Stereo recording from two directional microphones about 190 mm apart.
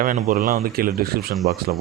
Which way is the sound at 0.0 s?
45° right (ahead or behind).